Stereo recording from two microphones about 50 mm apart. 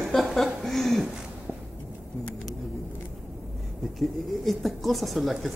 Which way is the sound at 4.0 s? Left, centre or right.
Centre.